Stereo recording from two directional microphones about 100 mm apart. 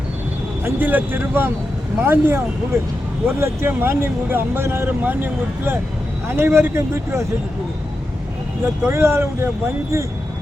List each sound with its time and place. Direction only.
0.6 s speech: 20° right (ahead or behind)
8.6 s speech: 25° right (ahead or behind)